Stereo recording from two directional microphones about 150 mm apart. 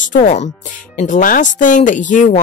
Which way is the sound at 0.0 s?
60° left (ahead or behind).